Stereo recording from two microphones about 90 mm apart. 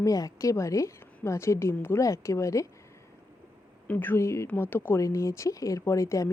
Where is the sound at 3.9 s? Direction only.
20° left (ahead or behind).